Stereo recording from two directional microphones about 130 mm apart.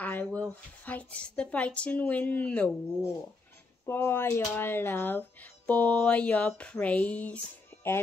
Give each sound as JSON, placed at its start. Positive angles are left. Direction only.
{"t": 0.0, "sound": "speech", "side_deg": 10}
{"t": 3.8, "sound": "speech", "side_deg": 20}